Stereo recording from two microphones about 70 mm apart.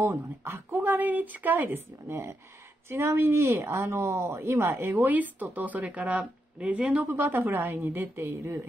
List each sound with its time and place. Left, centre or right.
0.7 s speech: right
2.0 s speech: right